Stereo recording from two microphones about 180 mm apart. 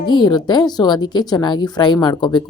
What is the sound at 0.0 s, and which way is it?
A woman's voice, 25° left (ahead or behind).